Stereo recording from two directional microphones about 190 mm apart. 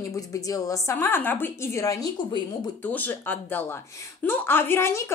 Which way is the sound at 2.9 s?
10° left (ahead or behind).